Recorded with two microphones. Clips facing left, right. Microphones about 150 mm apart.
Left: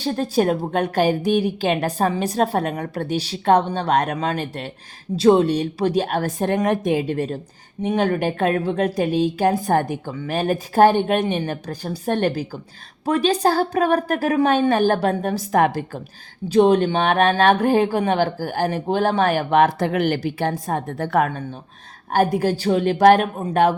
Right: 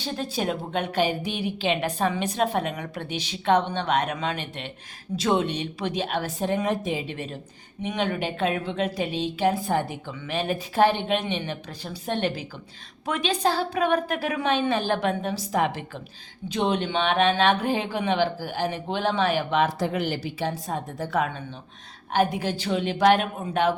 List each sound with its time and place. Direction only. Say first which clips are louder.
0.0 s a woman's voice: left 8 dB; 45° left (ahead or behind)
16.5 s speech: left 10 dB; 45° left (ahead or behind)